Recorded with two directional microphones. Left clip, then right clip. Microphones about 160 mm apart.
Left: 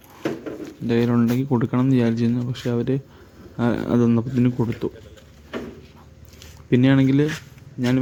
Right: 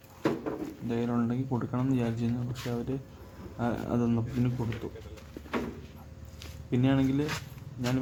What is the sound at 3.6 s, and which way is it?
Speech, 45° left (ahead or behind).